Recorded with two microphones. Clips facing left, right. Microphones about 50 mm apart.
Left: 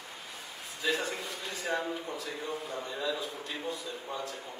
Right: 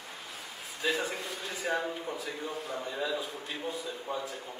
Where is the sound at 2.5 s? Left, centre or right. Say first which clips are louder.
Right 1 dB; centre.